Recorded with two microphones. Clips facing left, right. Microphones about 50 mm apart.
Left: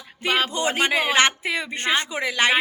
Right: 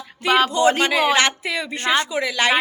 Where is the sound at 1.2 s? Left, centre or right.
Left.